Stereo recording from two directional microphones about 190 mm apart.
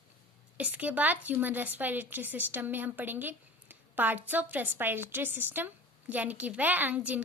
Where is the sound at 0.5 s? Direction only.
5° right (ahead or behind).